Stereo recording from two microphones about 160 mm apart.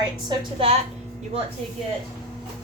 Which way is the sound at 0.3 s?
35° right (ahead or behind).